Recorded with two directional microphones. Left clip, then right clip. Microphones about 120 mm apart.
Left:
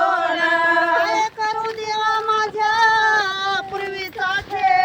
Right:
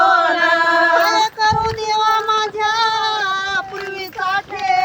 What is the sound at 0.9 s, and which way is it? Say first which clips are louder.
Child singing: right 4 dB; 35° right (ahead or behind).